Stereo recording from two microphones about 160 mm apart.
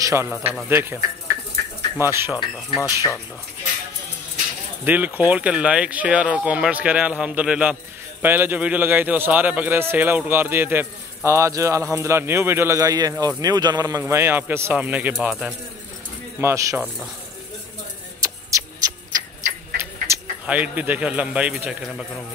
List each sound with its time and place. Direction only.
0.0 s a man's voice: 15° right (ahead or behind)
2.7 s speech: 20° left (ahead or behind)
4.8 s a man's voice: 10° right (ahead or behind)
16.3 s a man's voice: 15° right (ahead or behind)
18.2 s a sound: 20° right (ahead or behind)
19.8 s speech: 15° right (ahead or behind)